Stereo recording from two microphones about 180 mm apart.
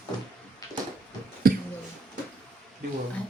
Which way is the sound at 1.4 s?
55° right (ahead or behind).